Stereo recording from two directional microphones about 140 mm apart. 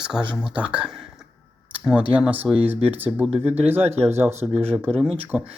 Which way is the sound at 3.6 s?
15° right (ahead or behind).